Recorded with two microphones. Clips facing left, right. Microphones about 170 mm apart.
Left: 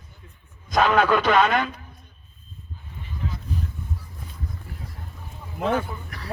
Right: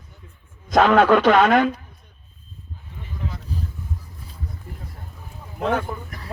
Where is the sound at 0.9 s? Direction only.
75° right (ahead or behind).